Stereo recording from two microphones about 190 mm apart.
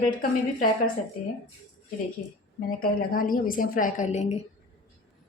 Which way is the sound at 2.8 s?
50° left (ahead or behind).